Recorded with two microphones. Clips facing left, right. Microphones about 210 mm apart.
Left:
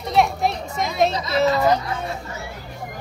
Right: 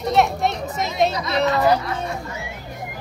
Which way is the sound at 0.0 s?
Centre (ahead or behind).